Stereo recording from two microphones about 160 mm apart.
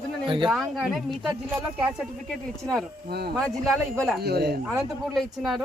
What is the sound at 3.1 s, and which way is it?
Speech, 80° right.